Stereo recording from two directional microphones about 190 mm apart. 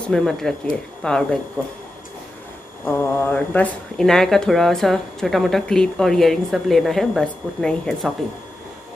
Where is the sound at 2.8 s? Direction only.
10° left (ahead or behind).